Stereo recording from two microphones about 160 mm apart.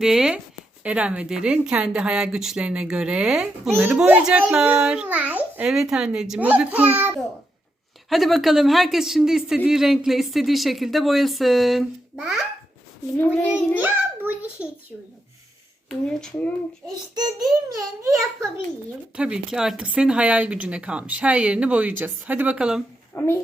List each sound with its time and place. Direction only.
0.0 s speech: 5° right (ahead or behind)
8.1 s speech: centre (ahead or behind)
13.1 s a child's voice: 15° left (ahead or behind)
13.5 s a child's voice: 10° right (ahead or behind)
16.0 s speech: 5° left (ahead or behind)
17.2 s a child's voice: 25° right (ahead or behind)
19.1 s speech: 5° right (ahead or behind)
23.1 s speech: 15° left (ahead or behind)